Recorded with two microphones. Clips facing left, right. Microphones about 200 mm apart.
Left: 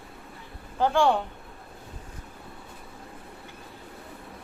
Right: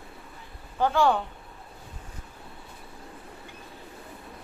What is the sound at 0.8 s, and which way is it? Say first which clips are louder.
Speech: left 1 dB; 15° left (ahead or behind).